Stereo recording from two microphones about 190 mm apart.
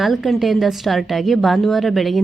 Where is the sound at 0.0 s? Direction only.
Centre (ahead or behind).